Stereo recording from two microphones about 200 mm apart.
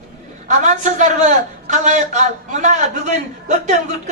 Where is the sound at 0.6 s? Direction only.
40° right (ahead or behind).